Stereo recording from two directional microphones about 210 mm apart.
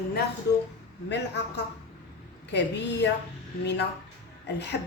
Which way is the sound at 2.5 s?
55° left (ahead or behind).